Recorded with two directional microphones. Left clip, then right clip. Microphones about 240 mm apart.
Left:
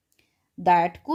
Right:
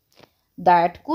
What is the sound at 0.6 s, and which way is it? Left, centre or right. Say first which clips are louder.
Speech: right 3 dB; centre.